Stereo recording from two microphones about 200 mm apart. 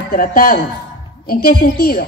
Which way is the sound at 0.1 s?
45° left (ahead or behind).